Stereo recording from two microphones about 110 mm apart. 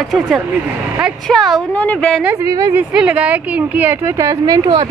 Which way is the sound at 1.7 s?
15° left (ahead or behind).